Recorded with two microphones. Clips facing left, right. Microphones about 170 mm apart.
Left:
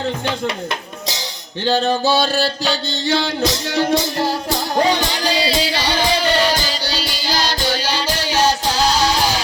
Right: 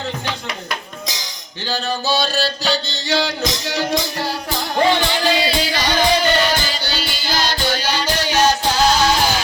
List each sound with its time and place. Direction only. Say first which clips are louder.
2.0 s music: left 3 dB; 55° left (ahead or behind)
4.8 s music: right 2 dB; 40° left (ahead or behind)